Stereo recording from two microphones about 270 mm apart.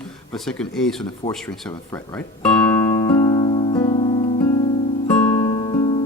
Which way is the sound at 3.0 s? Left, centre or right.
Centre.